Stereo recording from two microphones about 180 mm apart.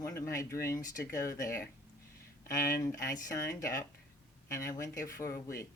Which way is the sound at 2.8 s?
15° left (ahead or behind).